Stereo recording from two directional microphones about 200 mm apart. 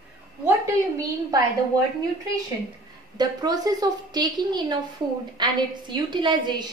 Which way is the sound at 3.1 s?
20° right (ahead or behind).